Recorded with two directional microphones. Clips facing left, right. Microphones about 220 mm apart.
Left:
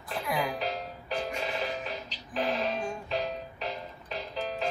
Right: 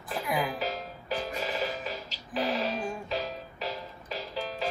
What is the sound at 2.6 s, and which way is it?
Music, centre (ahead or behind).